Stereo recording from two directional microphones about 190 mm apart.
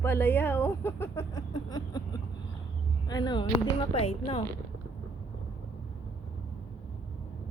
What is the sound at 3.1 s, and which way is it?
Speech, 20° left (ahead or behind).